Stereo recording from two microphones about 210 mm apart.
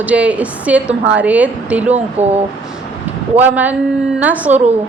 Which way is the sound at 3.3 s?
10° right (ahead or behind).